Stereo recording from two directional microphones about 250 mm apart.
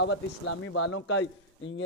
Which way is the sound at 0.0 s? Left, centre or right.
Left.